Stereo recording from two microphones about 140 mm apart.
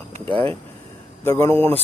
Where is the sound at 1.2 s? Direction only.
15° left (ahead or behind).